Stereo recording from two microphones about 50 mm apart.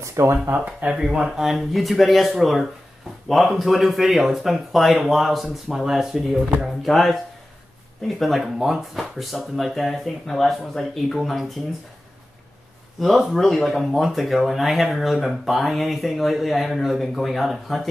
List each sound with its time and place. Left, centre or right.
0.0 s speech: right
0.8 s speech: centre
8.2 s speech: centre
13.0 s speech: centre